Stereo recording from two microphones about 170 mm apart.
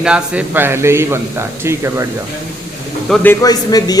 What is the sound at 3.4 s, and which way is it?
Speech, 20° left (ahead or behind).